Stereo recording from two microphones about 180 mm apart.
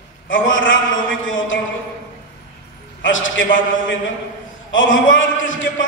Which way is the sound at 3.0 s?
90° left.